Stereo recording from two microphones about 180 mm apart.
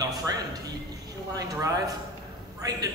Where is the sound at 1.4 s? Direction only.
20° right (ahead or behind).